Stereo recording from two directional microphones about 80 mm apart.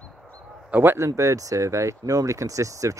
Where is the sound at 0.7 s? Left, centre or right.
Right.